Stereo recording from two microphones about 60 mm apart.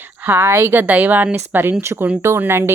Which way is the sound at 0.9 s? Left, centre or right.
Right.